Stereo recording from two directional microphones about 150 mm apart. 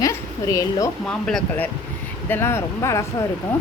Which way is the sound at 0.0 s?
20° left (ahead or behind).